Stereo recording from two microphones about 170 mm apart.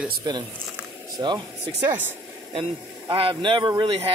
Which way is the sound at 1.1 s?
25° right (ahead or behind).